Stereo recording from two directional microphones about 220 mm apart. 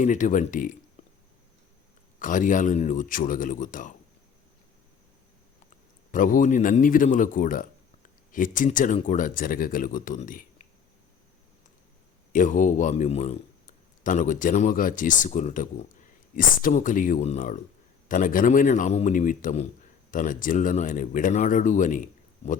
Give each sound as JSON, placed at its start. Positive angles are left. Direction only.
{"t": 0.0, "sound": "a man's voice", "side_deg": 35}
{"t": 1.0, "sound": "a sound", "side_deg": 30}
{"t": 2.1, "sound": "a man's voice", "side_deg": 35}
{"t": 6.1, "sound": "a man's voice", "side_deg": 35}
{"t": 12.3, "sound": "a man's voice", "side_deg": 35}